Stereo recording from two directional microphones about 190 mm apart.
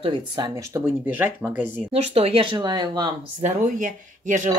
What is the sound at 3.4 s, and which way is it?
Speech, 45° right (ahead or behind).